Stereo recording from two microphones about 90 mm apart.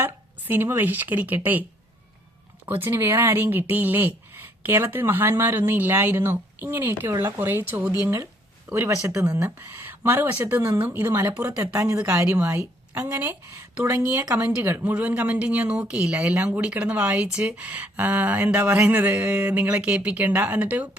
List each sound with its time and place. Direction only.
0.0 s speech: 25° right (ahead or behind)
2.6 s speech: 25° right (ahead or behind)
10.8 s speech: 20° right (ahead or behind)
11.6 s speech: 35° right (ahead or behind); by 21.0 s 15° right (ahead or behind)